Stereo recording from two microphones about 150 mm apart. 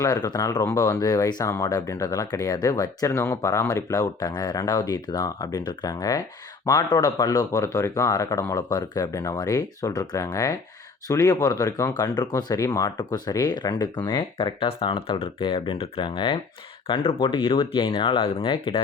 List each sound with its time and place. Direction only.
0.0 s speech: 25° left (ahead or behind)